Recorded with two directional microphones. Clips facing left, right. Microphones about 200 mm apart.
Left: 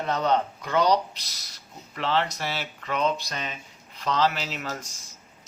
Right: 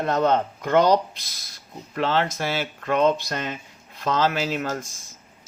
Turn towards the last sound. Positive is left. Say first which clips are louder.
# right 7 dB
turn(degrees=-50)  # may be behind; listen again after turning